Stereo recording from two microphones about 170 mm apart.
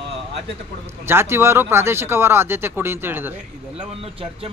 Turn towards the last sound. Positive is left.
turn(degrees=-35)  # may be behind; listen again after turning